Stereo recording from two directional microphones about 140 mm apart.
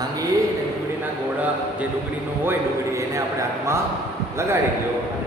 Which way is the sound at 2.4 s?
20° right (ahead or behind).